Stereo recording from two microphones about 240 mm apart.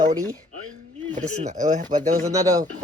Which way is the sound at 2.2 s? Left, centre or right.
Centre.